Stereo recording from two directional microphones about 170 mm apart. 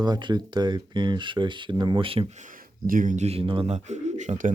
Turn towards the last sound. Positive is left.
turn(degrees=-45)  # may be behind; listen again after turning